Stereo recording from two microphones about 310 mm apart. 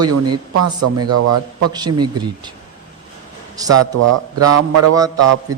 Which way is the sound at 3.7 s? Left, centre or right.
Right.